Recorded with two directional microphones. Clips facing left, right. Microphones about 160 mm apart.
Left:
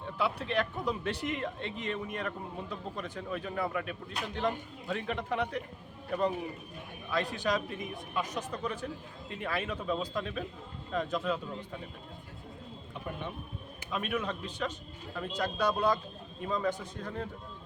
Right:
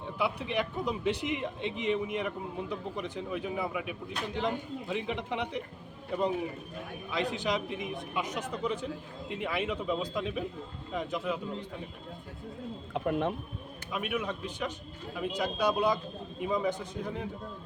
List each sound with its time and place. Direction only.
0.2 s speech: 15° right (ahead or behind)
12.9 s speech: 90° right
13.9 s speech: 10° right (ahead or behind)